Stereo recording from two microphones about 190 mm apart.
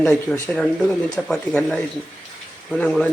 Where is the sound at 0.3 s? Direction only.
5° left (ahead or behind).